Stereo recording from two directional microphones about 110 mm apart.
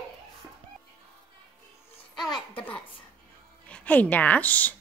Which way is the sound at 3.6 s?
10° left (ahead or behind).